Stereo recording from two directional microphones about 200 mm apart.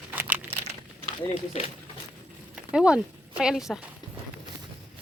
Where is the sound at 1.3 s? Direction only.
35° left (ahead or behind).